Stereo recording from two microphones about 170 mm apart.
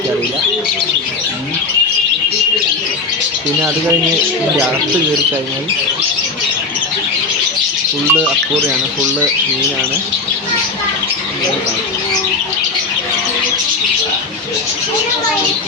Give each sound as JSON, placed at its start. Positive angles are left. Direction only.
{"t": 8.1, "sound": "speech", "side_deg": -10}